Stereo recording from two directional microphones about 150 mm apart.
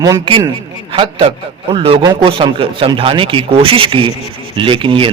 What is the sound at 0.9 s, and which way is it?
A man's voice, 35° right (ahead or behind).